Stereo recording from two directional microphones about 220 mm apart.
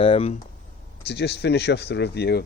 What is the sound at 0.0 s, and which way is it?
Speech, 25° left (ahead or behind).